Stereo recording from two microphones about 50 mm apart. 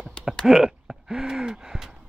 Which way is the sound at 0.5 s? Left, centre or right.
Centre.